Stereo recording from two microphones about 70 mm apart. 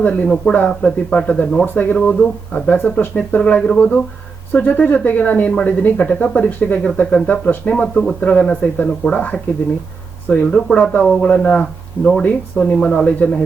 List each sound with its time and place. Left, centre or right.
0.0 s speech: centre